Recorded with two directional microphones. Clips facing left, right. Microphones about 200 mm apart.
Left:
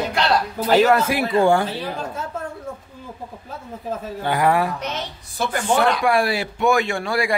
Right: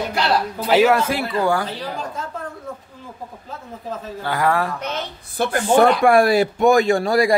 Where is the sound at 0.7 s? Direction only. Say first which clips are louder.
Even; 5° right (ahead or behind).